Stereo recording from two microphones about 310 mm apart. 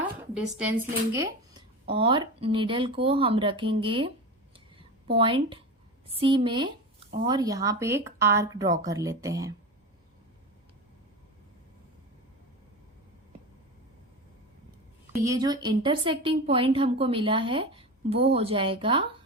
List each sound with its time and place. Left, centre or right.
0.5 s speech: centre
5.1 s speech: centre
15.1 s speech: centre